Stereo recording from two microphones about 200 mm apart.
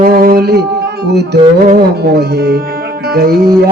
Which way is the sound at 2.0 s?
55° right (ahead or behind).